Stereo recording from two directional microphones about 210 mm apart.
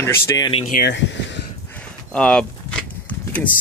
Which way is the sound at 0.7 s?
50° left (ahead or behind).